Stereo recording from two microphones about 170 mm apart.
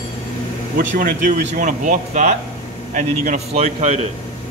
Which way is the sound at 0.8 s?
50° right (ahead or behind).